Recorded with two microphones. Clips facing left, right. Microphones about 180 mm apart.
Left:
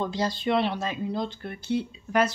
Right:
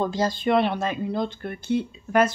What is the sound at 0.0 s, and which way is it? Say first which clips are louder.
Speech: right 4 dB; 45° right (ahead or behind).